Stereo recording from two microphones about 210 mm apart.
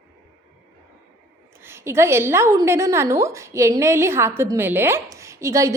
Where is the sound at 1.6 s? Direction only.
10° right (ahead or behind).